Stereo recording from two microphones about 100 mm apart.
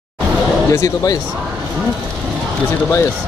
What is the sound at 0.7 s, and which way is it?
Speech, 30° left (ahead or behind).